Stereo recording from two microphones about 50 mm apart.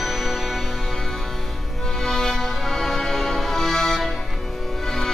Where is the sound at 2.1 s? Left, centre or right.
Centre.